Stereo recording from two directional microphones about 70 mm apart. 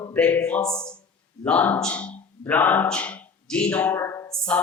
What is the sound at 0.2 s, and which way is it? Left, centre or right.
A man's voice, centre.